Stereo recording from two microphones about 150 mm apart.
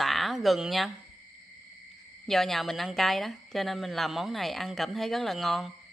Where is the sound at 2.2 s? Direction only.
Centre (ahead or behind).